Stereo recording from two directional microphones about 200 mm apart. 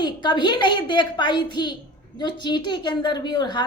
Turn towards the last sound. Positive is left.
turn(degrees=20)  # may be behind; listen again after turning